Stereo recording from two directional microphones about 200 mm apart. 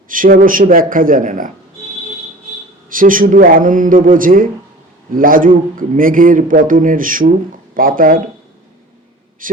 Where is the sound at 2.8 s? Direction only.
45° right (ahead or behind).